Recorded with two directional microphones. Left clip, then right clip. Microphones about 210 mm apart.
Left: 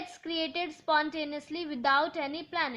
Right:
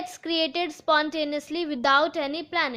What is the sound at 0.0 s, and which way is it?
A woman's voice, 40° right (ahead or behind).